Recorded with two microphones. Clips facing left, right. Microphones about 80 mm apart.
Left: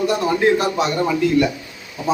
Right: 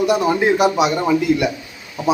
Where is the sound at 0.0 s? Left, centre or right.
Centre.